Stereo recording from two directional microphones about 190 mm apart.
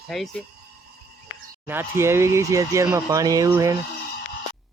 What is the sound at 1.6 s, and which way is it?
Speech, 10° right (ahead or behind).